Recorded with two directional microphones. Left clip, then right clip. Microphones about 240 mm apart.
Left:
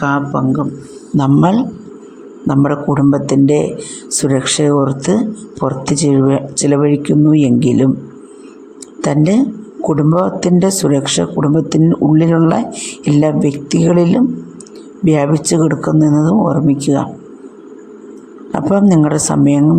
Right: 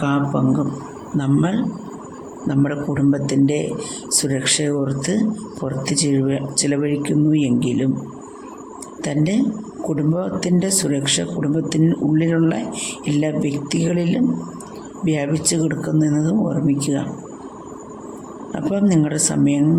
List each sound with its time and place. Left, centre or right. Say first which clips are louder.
0.0 s speech: left 5 dB; centre
1.1 s speech: left 8 dB; left
9.0 s speech: left 8 dB; centre
18.5 s speech: left 7 dB; centre